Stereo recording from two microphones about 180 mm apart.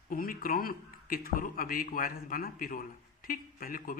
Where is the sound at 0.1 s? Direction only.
50° left (ahead or behind).